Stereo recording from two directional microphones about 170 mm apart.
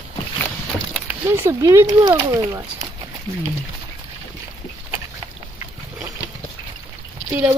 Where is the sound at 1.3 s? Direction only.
15° right (ahead or behind).